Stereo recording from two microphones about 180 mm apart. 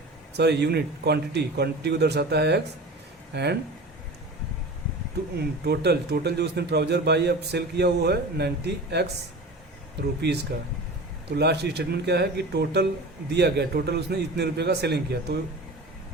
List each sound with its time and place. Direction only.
0.3 s a man's voice: 65° right (ahead or behind)
5.4 s a man's voice: 65° right (ahead or behind)
10.2 s a man's voice: 70° right (ahead or behind)